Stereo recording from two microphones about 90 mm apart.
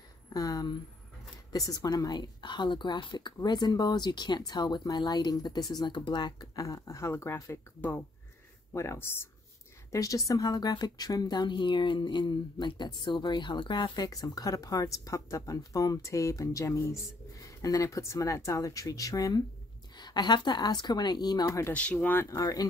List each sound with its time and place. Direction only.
0.3 s speech: 45° left (ahead or behind)
8.7 s speech: 30° left (ahead or behind)
9.9 s a woman's voice: 40° left (ahead or behind)
20.0 s speech: 55° left (ahead or behind)
21.5 s a woman's voice: 35° left (ahead or behind)
22.0 s speech: 25° left (ahead or behind)
22.3 s speech: 40° left (ahead or behind)